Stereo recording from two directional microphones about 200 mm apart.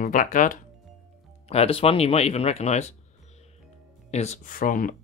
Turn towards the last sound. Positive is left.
turn(degrees=45)  # may be behind; listen again after turning